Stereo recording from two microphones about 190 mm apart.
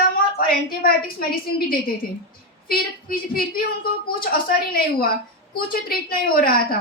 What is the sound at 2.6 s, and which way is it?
A woman's voice, 50° left (ahead or behind).